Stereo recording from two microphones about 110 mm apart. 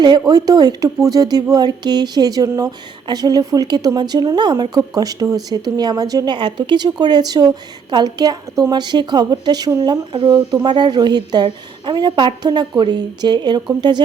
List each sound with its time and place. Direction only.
0.0 s speech: 40° right (ahead or behind)